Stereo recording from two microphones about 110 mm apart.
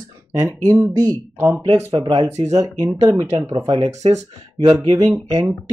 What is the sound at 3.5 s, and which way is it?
Speech, 45° right (ahead or behind).